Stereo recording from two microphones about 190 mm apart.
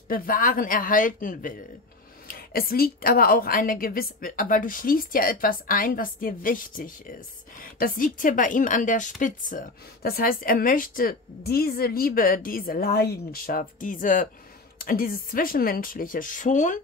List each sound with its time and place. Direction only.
0.1 s a woman's voice: 50° left (ahead or behind)